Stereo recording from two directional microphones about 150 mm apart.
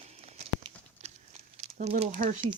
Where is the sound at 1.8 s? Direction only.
55° right (ahead or behind).